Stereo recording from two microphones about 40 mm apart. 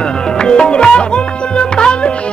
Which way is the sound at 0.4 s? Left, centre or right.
Left.